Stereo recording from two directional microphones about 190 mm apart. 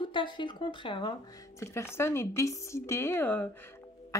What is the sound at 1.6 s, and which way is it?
A woman's voice, 15° left (ahead or behind).